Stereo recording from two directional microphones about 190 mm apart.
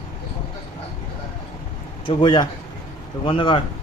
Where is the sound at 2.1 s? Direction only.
25° left (ahead or behind).